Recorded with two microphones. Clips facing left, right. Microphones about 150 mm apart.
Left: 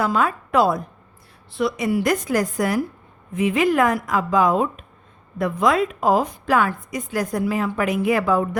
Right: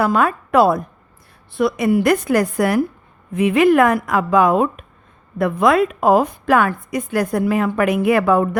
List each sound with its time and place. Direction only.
0.0 s a woman's voice: 60° right (ahead or behind)